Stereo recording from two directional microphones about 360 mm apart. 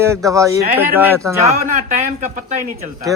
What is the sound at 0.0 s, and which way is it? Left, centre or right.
Speech, centre.